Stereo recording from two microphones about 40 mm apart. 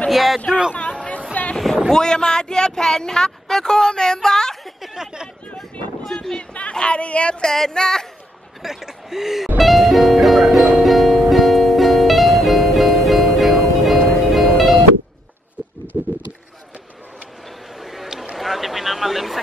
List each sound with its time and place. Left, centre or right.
0.1 s a man's voice: centre
0.7 s chatter: left
1.9 s speech: centre
4.8 s speech: centre
5.6 s a sound: centre
6.7 s speech: left
7.4 s speech: centre
8.6 s speech: centre
9.6 s music: centre
15.9 s a sound: right
17.8 s a sound: centre
18.4 s vehicle: centre